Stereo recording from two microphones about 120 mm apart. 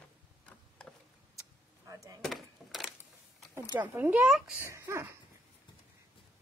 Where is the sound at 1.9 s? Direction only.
30° right (ahead or behind).